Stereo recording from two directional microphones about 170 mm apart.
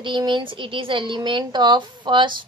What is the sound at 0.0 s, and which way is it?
A woman's voice, 25° right (ahead or behind).